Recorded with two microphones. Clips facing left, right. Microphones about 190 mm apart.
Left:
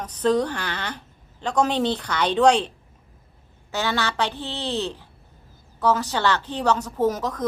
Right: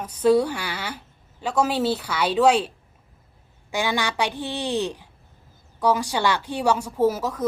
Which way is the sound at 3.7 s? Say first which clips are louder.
Even; 15° right (ahead or behind).